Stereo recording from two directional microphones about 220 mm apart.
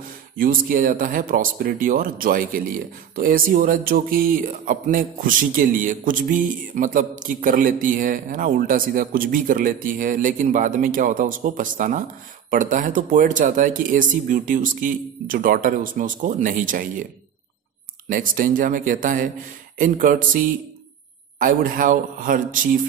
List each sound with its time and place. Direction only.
0.4 s speech: 40° right (ahead or behind)
18.0 s speech: 40° right (ahead or behind)
21.4 s speech: 40° right (ahead or behind)